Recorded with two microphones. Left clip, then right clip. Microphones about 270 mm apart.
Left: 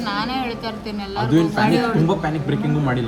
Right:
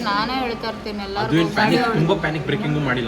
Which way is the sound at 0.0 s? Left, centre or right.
Centre.